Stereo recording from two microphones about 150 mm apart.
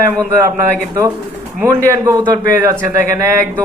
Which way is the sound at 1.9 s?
20° right (ahead or behind).